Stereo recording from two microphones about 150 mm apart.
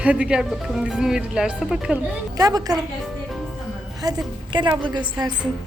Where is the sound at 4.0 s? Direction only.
30° right (ahead or behind).